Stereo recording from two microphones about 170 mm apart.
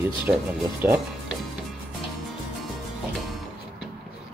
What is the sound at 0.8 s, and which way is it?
Speech, 10° right (ahead or behind).